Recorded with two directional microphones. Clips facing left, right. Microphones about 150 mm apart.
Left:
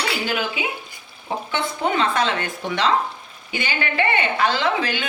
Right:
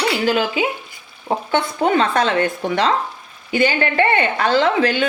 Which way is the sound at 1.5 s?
45° right (ahead or behind).